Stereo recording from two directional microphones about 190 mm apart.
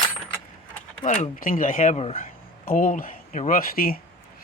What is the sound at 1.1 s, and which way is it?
Speech, 45° left (ahead or behind).